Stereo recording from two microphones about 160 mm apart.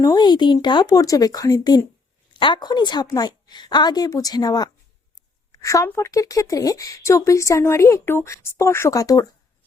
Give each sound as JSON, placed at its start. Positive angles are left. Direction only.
{"t": 0.1, "sound": "speech", "side_deg": 25}